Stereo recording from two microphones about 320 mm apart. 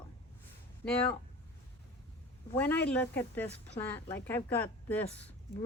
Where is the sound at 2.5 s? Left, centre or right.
Centre.